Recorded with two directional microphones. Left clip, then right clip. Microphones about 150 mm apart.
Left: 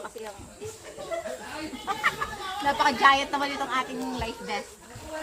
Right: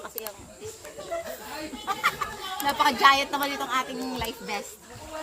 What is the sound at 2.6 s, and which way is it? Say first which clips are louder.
A woman's voice: right 1 dB; 25° right (ahead or behind).